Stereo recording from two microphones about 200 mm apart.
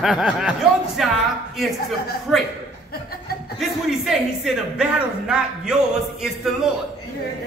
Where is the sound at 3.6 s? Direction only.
Centre (ahead or behind).